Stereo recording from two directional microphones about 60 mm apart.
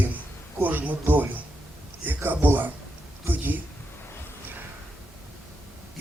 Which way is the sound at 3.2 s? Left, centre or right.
Right.